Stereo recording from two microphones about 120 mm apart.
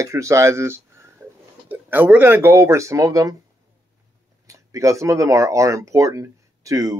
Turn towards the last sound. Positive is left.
turn(degrees=-25)  # may be behind; listen again after turning